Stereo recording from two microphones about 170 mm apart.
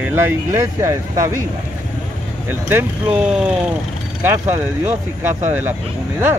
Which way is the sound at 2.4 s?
10° right (ahead or behind).